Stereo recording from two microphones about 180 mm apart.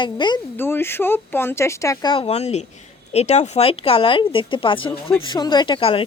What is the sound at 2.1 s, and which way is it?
Speech, 35° left (ahead or behind).